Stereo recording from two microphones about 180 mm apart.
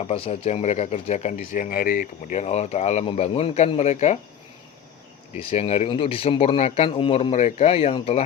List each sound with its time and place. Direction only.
0.1 s speech: 35° left (ahead or behind)
5.4 s speech: 35° left (ahead or behind)